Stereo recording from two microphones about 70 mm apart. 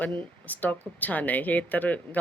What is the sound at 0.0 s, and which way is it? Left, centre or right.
Speech, left.